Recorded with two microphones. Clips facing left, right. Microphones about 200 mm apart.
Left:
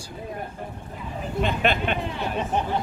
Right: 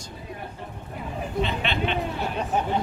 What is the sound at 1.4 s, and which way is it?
Speech, 50° left (ahead or behind).